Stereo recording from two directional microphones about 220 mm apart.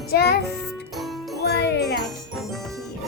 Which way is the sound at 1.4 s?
50° left (ahead or behind).